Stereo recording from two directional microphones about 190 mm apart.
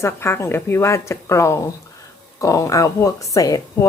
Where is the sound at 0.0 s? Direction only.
15° left (ahead or behind).